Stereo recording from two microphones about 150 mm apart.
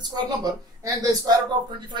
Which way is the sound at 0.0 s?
25° right (ahead or behind).